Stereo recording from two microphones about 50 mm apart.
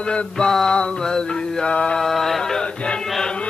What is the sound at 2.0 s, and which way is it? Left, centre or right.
Mantra, centre.